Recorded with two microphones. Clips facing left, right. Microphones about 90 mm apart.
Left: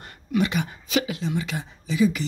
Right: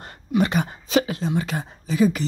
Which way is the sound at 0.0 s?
35° right (ahead or behind).